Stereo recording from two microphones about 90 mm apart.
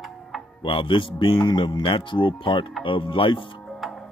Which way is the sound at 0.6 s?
75° left (ahead or behind).